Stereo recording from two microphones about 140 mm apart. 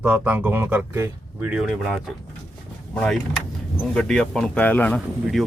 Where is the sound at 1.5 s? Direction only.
5° right (ahead or behind); by 5.0 s 10° left (ahead or behind).